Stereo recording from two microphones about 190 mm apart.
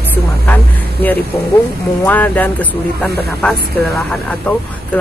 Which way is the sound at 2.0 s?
10° left (ahead or behind).